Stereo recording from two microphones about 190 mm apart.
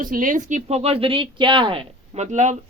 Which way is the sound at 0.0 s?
45° right (ahead or behind).